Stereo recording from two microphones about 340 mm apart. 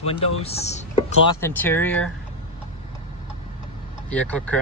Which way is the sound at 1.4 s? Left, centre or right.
Centre.